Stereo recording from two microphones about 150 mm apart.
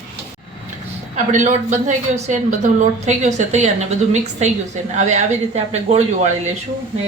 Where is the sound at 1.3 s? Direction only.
55° right (ahead or behind).